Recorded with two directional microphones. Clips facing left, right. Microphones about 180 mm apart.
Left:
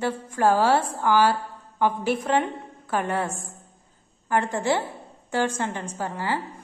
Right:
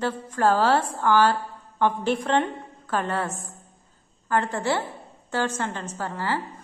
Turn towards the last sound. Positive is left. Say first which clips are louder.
# even
turn(degrees=15)  # may be behind; listen again after turning